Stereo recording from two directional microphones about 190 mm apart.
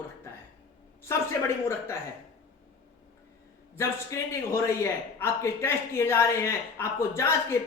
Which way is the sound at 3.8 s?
15° left (ahead or behind).